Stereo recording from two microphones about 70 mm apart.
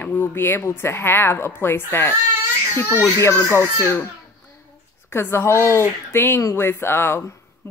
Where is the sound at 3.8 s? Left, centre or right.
Left.